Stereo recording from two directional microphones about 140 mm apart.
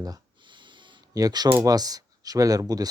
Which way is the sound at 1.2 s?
30° right (ahead or behind).